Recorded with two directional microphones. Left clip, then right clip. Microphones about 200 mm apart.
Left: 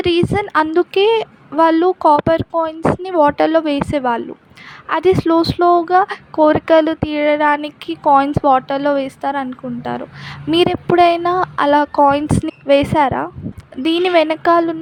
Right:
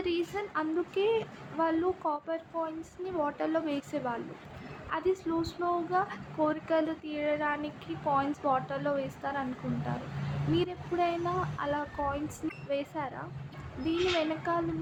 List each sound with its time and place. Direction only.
0.0 s a woman's voice: 55° left (ahead or behind)